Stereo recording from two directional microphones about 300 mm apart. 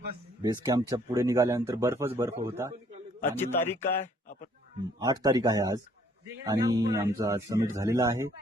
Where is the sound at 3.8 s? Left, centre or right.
Left.